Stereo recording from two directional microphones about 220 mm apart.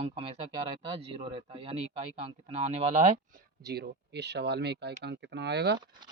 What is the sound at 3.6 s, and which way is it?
Speech, 45° right (ahead or behind).